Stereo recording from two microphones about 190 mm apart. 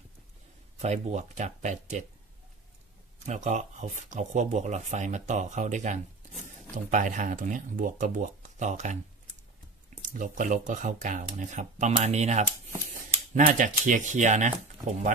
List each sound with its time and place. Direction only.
0.7 s speech: 35° right (ahead or behind)
3.3 s speech: 40° right (ahead or behind)
10.0 s speech: 40° right (ahead or behind)